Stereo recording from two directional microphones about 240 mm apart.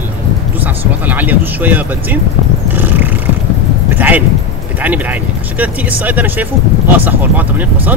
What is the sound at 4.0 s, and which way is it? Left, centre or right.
Speech, centre.